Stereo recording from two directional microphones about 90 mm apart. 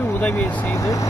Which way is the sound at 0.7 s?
35° left (ahead or behind).